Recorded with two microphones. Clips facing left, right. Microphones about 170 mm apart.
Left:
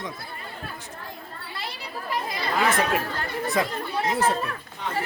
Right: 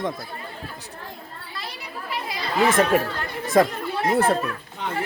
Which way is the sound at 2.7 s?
45° right (ahead or behind).